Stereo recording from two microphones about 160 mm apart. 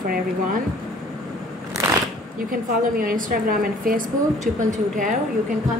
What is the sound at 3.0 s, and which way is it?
A woman's voice, 60° right (ahead or behind).